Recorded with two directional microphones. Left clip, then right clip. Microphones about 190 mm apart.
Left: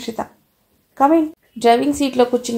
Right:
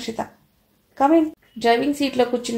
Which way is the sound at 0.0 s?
30° left (ahead or behind).